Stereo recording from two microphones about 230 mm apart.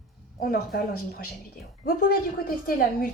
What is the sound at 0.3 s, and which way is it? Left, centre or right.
Speech, left.